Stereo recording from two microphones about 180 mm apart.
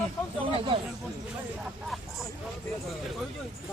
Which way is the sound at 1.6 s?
Centre (ahead or behind).